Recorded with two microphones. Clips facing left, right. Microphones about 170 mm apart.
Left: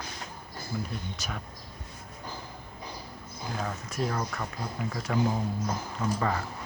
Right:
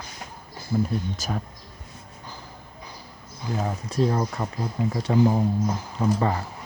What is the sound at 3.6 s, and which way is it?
Speech, 30° right (ahead or behind).